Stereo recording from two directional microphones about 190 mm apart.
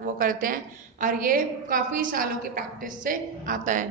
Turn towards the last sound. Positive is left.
turn(degrees=-40)  # may be behind; listen again after turning